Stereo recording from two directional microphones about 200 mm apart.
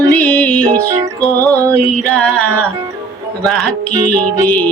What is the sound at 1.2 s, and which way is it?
Music, 15° right (ahead or behind).